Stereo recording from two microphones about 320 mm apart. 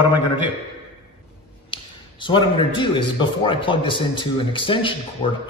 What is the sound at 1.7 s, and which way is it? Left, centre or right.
A man's voice, centre.